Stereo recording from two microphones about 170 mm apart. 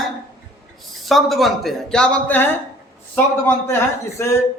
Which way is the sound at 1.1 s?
Centre (ahead or behind).